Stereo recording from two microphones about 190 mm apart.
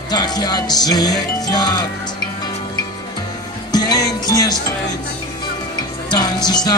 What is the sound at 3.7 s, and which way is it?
Music, 20° left (ahead or behind).